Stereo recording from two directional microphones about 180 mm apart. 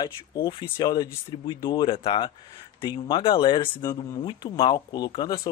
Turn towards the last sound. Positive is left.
turn(degrees=25)  # may be behind; listen again after turning